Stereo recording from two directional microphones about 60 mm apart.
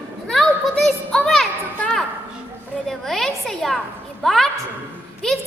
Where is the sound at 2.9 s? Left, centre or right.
Centre.